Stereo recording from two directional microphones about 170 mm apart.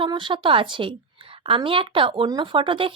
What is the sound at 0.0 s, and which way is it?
A woman's voice, 30° right (ahead or behind).